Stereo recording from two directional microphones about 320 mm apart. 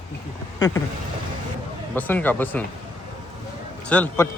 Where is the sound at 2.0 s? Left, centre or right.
Centre.